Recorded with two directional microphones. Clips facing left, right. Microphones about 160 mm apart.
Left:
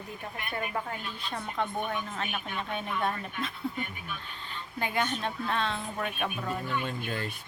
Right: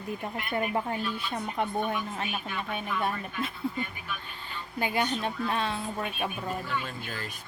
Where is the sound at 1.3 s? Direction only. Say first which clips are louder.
Left 1 dB; 10° right (ahead or behind).